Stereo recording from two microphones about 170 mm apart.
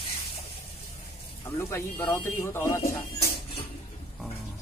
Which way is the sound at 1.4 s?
15° left (ahead or behind).